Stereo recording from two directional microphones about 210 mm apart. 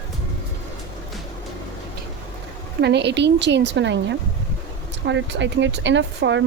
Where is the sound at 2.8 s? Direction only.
55° right (ahead or behind).